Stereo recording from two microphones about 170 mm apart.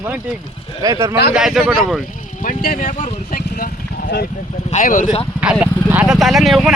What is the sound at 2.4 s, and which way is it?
Vehicle, 55° left (ahead or behind).